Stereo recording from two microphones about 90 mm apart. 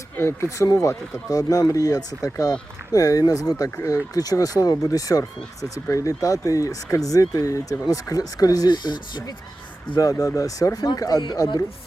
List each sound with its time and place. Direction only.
0.2 s speech: 30° left (ahead or behind); by 9.3 s 55° left (ahead or behind)
10.0 s speech: 40° left (ahead or behind); by 11.6 s 55° left (ahead or behind)